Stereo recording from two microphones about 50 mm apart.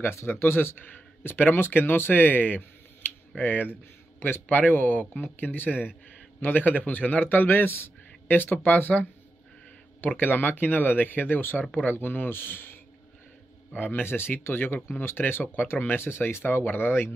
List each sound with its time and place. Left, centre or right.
0.0 s speech: left
0.7 s speech: left
10.0 s speech: left
13.7 s speech: left
16.0 s speech: left